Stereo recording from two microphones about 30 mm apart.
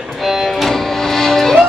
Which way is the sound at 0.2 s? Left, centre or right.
Centre.